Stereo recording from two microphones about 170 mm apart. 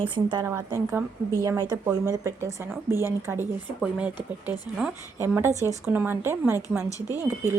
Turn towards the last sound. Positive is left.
turn(degrees=-10)  # may be behind; listen again after turning